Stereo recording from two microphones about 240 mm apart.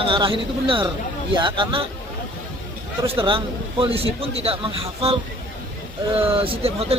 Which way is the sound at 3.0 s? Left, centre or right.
Right.